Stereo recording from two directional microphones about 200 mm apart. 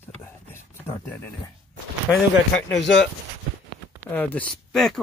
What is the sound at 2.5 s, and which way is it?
Speech, 65° left (ahead or behind).